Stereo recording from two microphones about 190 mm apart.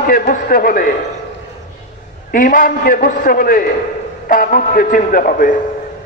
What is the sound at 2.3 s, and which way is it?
A man's voice, 45° left (ahead or behind).